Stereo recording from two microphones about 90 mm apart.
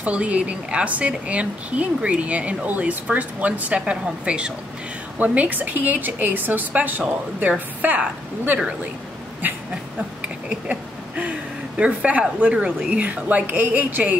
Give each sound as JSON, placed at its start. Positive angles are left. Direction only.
{"t": 0.0, "sound": "a woman's voice", "side_deg": -15}
{"t": 10.2, "sound": "a sound", "side_deg": -15}
{"t": 11.8, "sound": "a woman's voice", "side_deg": -15}